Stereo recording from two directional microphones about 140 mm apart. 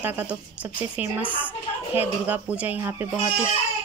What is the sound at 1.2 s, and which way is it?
Speech, 10° left (ahead or behind).